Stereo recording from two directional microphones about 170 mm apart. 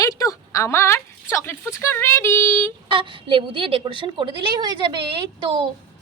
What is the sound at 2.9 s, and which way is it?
A woman's voice, 30° right (ahead or behind).